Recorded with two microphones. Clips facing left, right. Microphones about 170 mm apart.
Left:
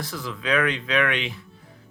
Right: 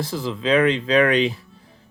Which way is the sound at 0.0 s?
30° right (ahead or behind).